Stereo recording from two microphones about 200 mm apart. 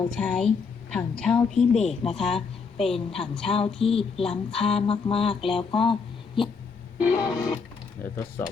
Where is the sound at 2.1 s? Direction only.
Centre (ahead or behind).